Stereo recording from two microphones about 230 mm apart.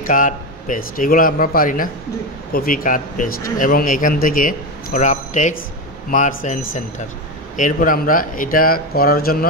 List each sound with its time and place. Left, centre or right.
0.0 s a man's voice: left